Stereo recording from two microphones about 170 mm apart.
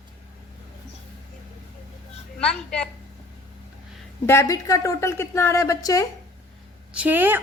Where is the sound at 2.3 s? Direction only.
5° left (ahead or behind).